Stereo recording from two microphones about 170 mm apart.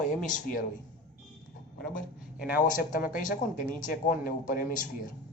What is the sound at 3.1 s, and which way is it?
Speech, 50° left (ahead or behind).